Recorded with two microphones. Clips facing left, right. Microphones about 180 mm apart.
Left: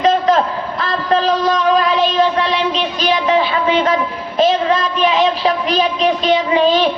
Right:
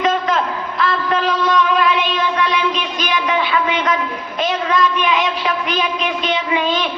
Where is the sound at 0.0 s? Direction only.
35° left (ahead or behind).